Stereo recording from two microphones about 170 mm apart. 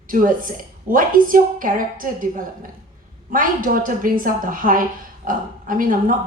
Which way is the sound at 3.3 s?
55° right (ahead or behind).